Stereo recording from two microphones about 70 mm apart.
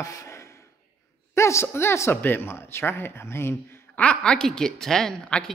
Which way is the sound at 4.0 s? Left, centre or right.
Centre.